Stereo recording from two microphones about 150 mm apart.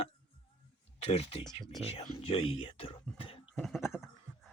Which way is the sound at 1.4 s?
30° left (ahead or behind).